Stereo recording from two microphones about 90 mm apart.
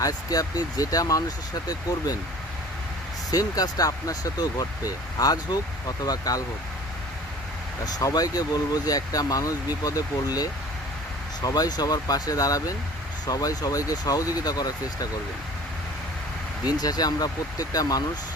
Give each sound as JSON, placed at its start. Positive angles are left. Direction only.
{"t": 0.0, "sound": "speech", "side_deg": 40}
{"t": 3.3, "sound": "speech", "side_deg": 45}
{"t": 7.9, "sound": "speech", "side_deg": 45}
{"t": 16.6, "sound": "speech", "side_deg": 45}